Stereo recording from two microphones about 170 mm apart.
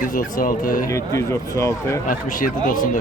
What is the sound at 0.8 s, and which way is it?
Speech, 20° left (ahead or behind).